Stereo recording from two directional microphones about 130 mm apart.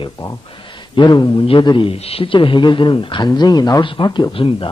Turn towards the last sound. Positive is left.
turn(degrees=45)  # may be behind; listen again after turning